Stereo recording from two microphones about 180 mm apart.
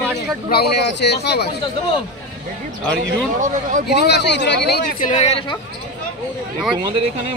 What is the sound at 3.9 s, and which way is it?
Speech, 70° left (ahead or behind).